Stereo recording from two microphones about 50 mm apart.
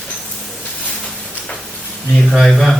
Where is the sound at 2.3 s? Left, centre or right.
Centre.